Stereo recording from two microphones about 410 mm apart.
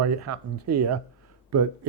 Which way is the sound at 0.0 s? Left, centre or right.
Right.